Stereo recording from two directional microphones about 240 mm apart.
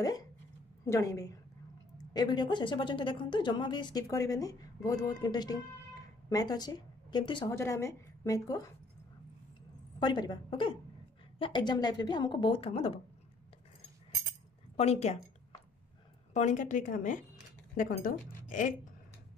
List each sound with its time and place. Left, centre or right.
0.0 s a woman's voice: centre
9.9 s a woman's voice: centre
14.8 s a woman's voice: left
16.3 s a woman's voice: left